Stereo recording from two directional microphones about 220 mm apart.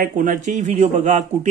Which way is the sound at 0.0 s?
40° right (ahead or behind).